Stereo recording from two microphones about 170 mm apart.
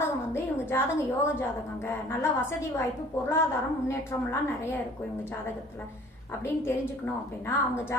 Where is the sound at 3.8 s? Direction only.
15° left (ahead or behind).